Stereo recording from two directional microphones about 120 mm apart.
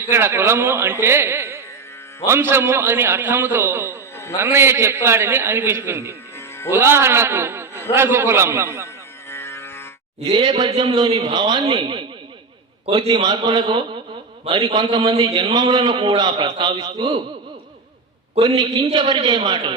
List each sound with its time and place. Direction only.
0.1 s a man's voice: 20° right (ahead or behind)
9.3 s music: 20° left (ahead or behind)
10.3 s a man's voice: 40° right (ahead or behind)
18.4 s a man's voice: 40° right (ahead or behind)